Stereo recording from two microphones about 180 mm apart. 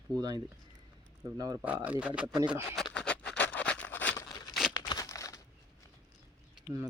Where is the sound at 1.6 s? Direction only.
10° right (ahead or behind).